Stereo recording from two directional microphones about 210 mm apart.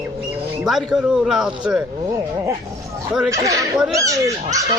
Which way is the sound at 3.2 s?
15° right (ahead or behind).